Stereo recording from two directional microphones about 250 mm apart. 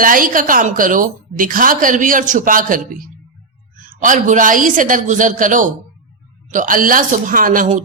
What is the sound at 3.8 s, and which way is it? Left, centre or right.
A woman's voice, right.